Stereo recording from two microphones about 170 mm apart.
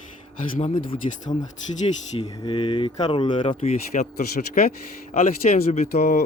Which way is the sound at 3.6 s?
45° left (ahead or behind).